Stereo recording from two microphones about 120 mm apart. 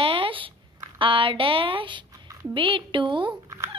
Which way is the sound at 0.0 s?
45° right (ahead or behind).